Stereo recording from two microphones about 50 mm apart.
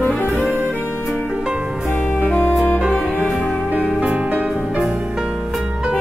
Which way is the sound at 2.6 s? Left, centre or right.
Right.